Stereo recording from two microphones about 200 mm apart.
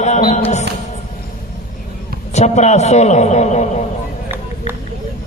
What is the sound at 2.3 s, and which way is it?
A man's voice, 35° left (ahead or behind).